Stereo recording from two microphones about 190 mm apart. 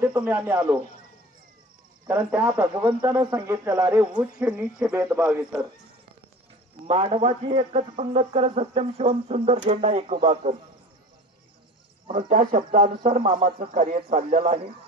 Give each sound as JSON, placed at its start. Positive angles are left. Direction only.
{"t": 0.0, "sound": "speech", "side_deg": -10}
{"t": 2.0, "sound": "speech", "side_deg": -10}
{"t": 6.9, "sound": "speech", "side_deg": -30}
{"t": 12.3, "sound": "speech", "side_deg": -45}
{"t": 14.1, "sound": "speech", "side_deg": -40}